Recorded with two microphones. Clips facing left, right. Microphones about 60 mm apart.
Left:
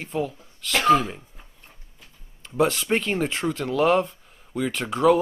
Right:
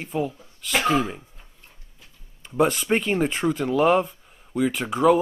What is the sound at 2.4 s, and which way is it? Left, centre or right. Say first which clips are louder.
Speech: right 1 dB; centre.